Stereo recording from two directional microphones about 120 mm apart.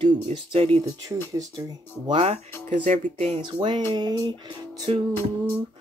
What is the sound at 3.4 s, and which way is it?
Music, 40° right (ahead or behind).